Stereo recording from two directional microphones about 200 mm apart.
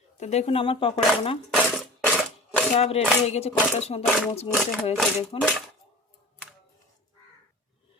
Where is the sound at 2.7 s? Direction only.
30° left (ahead or behind).